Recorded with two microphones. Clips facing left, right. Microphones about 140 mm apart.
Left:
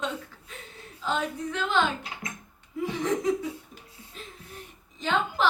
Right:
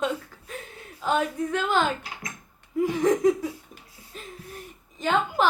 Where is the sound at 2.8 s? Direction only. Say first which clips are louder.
Right 6 dB; 45° right (ahead or behind).